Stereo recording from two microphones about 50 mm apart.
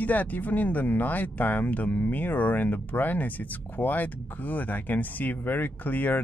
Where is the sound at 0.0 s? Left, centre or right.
Left.